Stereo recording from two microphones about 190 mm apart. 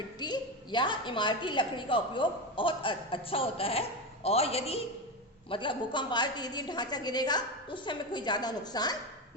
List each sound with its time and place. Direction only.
0.2 s a woman's voice: 25° left (ahead or behind)